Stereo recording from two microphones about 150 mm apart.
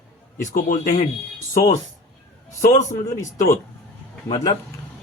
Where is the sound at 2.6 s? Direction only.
60° left (ahead or behind).